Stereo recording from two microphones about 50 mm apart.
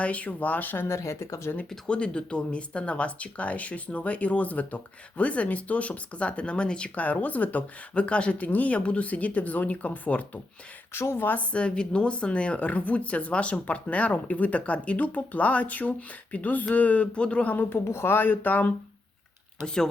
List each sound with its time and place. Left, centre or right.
0.0 s speech: left
0.9 s speech: left
1.9 s a woman's voice: left
7.0 s speech: left
10.9 s speech: left
11.3 s a woman's voice: left
17.7 s speech: left
19.6 s speech: centre